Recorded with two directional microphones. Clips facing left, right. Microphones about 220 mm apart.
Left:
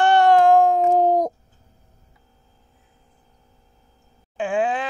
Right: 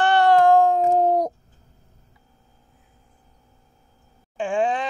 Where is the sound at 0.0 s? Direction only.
15° left (ahead or behind).